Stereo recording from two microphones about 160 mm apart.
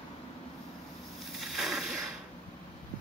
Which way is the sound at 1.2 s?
Centre (ahead or behind).